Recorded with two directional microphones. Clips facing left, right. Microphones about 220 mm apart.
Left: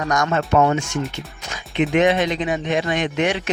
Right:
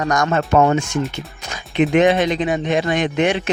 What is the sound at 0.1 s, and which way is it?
Speech, 35° right (ahead or behind).